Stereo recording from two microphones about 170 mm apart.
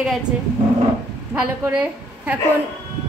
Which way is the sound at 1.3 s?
5° right (ahead or behind).